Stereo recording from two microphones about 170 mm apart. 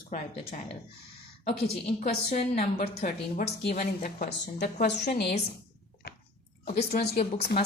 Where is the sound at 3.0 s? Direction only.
65° left (ahead or behind).